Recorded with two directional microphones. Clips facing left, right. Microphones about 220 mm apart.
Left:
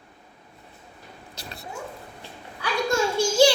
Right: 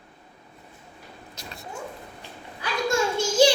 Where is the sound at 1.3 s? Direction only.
35° left (ahead or behind).